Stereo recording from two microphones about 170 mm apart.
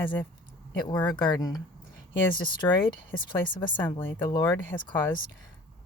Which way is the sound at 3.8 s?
10° left (ahead or behind).